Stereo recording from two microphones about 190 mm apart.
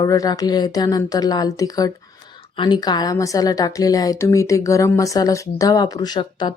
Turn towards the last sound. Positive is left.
turn(degrees=25)  # may be behind; listen again after turning